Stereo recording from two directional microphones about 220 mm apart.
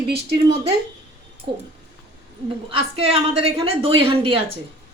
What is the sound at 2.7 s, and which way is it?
A woman's voice, 25° right (ahead or behind).